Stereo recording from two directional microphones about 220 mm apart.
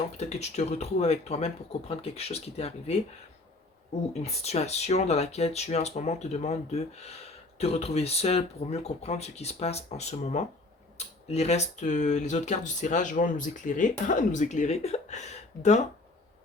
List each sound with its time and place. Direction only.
0.2 s speech: 30° left (ahead or behind)
4.2 s speech: 30° left (ahead or behind)